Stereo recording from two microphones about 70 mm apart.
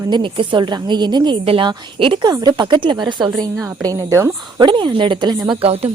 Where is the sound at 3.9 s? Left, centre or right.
Right.